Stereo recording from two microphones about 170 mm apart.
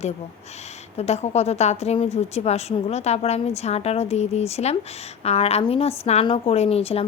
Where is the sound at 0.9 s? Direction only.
40° left (ahead or behind).